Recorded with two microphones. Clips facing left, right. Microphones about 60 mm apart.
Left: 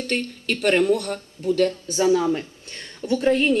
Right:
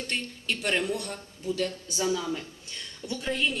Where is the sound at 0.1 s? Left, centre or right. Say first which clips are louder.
Left 7 dB; left.